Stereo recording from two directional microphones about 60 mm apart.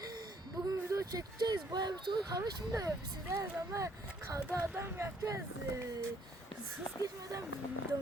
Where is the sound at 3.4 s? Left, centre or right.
Right.